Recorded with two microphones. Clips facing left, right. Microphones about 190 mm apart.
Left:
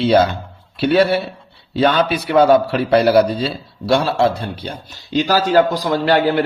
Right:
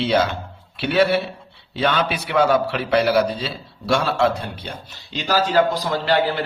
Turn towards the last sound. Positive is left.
turn(degrees=45)  # may be behind; listen again after turning